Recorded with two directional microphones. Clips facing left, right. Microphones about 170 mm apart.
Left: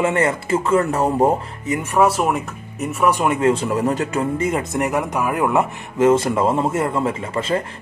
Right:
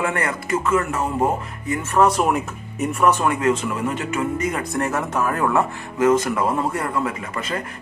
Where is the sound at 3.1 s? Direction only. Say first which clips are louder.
Left 2 dB; 20° left (ahead or behind).